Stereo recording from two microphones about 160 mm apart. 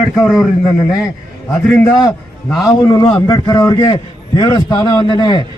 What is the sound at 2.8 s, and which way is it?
A man's voice, 25° left (ahead or behind).